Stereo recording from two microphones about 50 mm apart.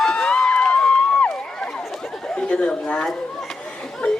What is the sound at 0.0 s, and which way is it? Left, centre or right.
Run, centre.